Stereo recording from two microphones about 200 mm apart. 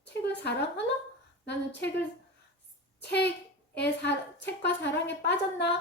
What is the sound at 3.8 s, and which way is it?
A woman's voice, 60° left (ahead or behind).